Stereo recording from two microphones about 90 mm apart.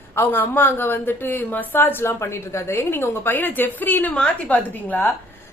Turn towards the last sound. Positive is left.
turn(degrees=20)  # may be behind; listen again after turning